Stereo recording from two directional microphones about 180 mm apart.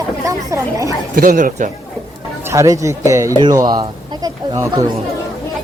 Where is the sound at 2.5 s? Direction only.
20° right (ahead or behind).